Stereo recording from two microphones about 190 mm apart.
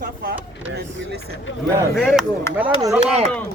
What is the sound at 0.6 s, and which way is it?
Speech, 75° right (ahead or behind).